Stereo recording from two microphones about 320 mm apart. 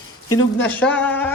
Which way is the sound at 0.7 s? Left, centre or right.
Centre.